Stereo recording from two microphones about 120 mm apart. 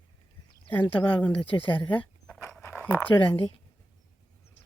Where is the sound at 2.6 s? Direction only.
20° left (ahead or behind).